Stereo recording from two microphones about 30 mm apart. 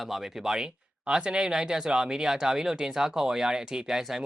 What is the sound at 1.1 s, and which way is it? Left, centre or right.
Speech, right.